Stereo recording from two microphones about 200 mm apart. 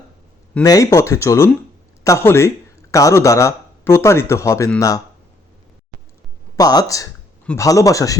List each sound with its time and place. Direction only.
0.6 s a man's voice: 15° left (ahead or behind)
6.6 s a man's voice: 20° left (ahead or behind)